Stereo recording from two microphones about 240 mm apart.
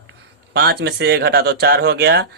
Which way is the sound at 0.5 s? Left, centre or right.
Right.